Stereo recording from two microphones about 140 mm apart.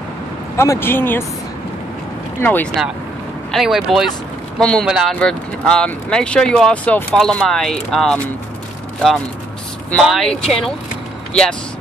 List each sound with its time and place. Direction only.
0.6 s speech: 20° left (ahead or behind)
2.4 s speech: 10° left (ahead or behind)
3.5 s speech: centre (ahead or behind)
10.0 s speech: centre (ahead or behind)